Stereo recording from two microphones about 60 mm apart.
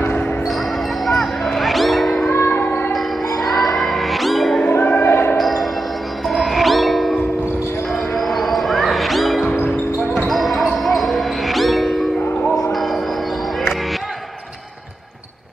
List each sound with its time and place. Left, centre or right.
1.0 s music: centre
2.2 s music: left
2.9 s music: centre
4.6 s music: left
5.0 s basketball bounce: left
5.4 s chime: centre
6.2 s music: centre
10.2 s basketball bounce: centre
12.7 s a sound: centre